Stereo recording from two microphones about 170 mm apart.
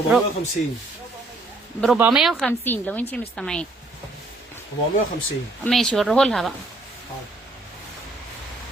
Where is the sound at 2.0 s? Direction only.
5° right (ahead or behind).